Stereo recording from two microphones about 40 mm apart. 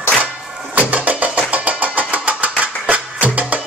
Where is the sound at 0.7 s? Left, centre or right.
Right.